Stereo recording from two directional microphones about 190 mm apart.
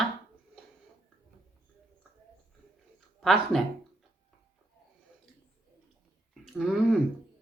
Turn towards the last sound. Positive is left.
turn(degrees=0)  # may be behind; listen again after turning